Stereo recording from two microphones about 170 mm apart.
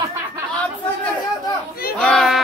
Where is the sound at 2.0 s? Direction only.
Centre (ahead or behind).